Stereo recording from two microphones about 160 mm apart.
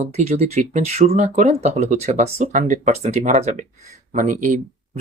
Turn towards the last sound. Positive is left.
turn(degrees=-55)  # may be behind; listen again after turning